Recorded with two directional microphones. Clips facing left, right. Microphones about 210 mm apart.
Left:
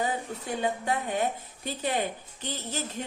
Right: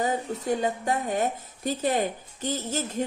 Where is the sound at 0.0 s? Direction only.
40° right (ahead or behind).